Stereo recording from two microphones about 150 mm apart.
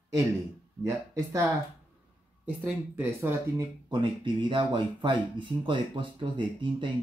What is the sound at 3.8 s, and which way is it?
Speech, 30° right (ahead or behind).